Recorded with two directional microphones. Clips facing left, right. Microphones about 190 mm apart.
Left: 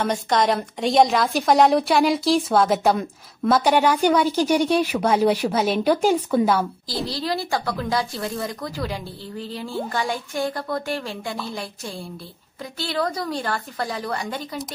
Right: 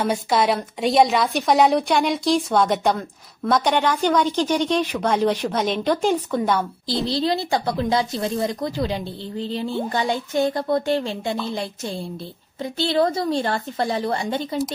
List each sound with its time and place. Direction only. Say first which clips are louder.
0.0 s a woman's voice: right 1 dB; 5° right (ahead or behind)
7.1 s speech: right 4 dB; 25° right (ahead or behind)